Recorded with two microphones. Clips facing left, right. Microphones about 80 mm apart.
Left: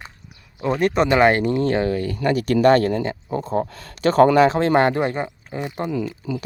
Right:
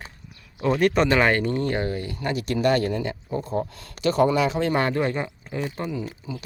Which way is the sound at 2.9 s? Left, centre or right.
Left.